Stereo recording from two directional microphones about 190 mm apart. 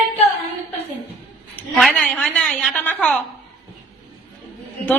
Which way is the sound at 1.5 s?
5° left (ahead or behind).